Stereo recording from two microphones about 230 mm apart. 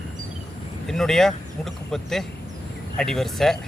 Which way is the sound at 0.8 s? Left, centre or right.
Centre.